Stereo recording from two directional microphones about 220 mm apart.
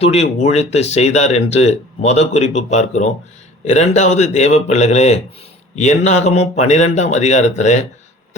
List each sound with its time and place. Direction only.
0.0 s a man's voice: 30° left (ahead or behind)